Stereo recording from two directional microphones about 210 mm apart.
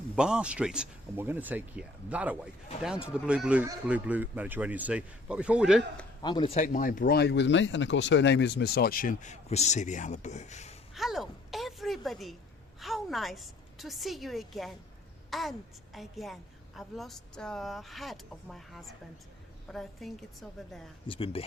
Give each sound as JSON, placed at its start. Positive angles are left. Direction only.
{"t": 0.2, "sound": "a woman's voice", "side_deg": -5}
{"t": 6.2, "sound": "speech", "side_deg": 25}
{"t": 10.9, "sound": "a sound", "side_deg": 0}
{"t": 12.8, "sound": "a woman's voice", "side_deg": 0}
{"t": 21.1, "sound": "speech", "side_deg": 25}